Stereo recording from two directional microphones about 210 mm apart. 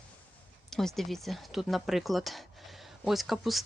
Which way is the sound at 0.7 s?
Centre (ahead or behind).